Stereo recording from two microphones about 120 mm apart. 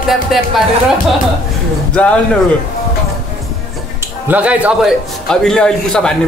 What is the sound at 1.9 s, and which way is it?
Speech, 10° left (ahead or behind).